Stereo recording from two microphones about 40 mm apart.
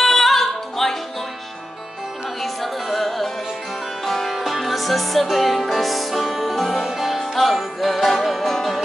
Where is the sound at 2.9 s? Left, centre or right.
Centre.